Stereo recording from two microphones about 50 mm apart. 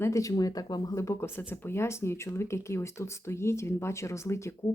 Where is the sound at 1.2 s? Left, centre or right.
Left.